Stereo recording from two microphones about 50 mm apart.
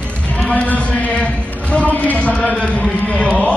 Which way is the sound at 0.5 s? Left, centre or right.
Left.